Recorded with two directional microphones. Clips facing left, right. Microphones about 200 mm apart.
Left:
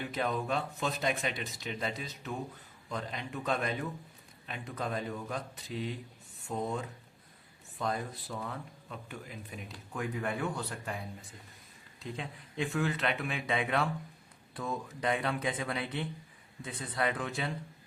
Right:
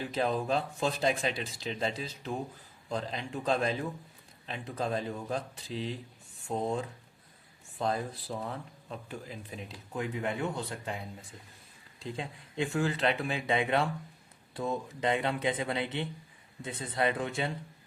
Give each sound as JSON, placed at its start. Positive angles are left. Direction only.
{"t": 0.1, "sound": "speech", "side_deg": -30}
{"t": 11.9, "sound": "speech", "side_deg": -30}